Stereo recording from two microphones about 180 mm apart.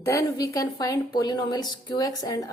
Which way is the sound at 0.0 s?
15° left (ahead or behind).